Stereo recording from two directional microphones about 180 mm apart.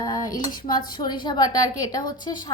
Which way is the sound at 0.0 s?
20° left (ahead or behind).